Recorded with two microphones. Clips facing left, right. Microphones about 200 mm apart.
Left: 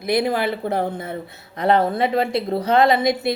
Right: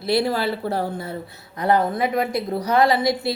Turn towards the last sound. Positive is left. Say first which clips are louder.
# left 2 dB
turn(degrees=20)  # may be behind; listen again after turning